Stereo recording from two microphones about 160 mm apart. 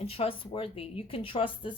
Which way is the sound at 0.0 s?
40° left (ahead or behind).